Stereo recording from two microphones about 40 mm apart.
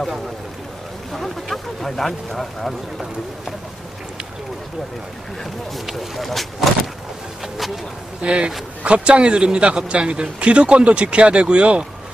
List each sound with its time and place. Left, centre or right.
1.1 s speech: centre
5.9 s speech: centre
8.2 s a man's voice: right